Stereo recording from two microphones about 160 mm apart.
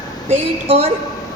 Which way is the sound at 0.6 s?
35° right (ahead or behind).